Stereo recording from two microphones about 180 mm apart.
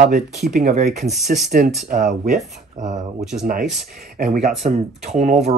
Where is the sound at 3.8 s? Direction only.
55° right (ahead or behind); by 5.5 s 40° right (ahead or behind).